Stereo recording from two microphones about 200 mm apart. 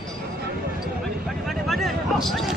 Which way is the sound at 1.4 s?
Centre (ahead or behind).